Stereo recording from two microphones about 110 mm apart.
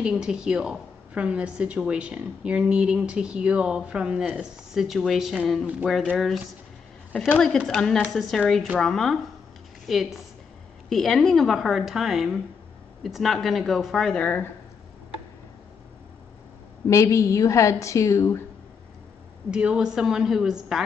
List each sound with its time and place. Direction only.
0.0 s a woman's voice: 5° right (ahead or behind)
7.5 s a woman's voice: 5° left (ahead or behind)
16.8 s a woman's voice: 30° left (ahead or behind)
19.5 s a woman's voice: 10° right (ahead or behind)